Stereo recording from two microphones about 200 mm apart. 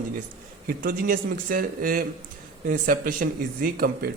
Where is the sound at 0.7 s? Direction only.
45° right (ahead or behind).